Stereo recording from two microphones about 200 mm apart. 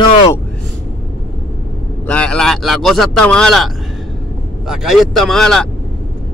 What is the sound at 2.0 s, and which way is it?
A man's voice, 5° left (ahead or behind).